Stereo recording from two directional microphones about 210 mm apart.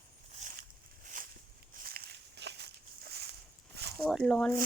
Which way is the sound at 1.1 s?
40° right (ahead or behind).